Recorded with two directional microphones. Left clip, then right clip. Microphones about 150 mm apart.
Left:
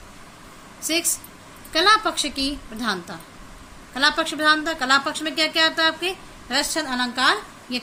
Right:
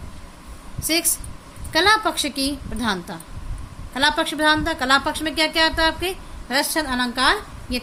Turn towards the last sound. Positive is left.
turn(degrees=-65)  # may be behind; listen again after turning